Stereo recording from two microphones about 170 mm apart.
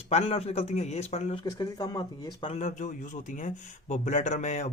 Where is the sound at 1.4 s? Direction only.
20° left (ahead or behind).